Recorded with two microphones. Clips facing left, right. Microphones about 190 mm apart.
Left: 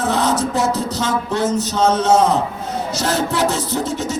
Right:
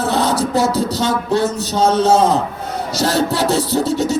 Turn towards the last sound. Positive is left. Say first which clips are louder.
# right 5 dB
turn(degrees=-35)  # may be behind; listen again after turning